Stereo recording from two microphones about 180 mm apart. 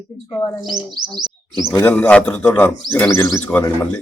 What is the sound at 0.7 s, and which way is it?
Speech, 25° right (ahead or behind).